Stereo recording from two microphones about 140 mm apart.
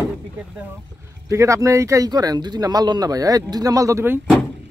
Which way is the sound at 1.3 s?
20° right (ahead or behind).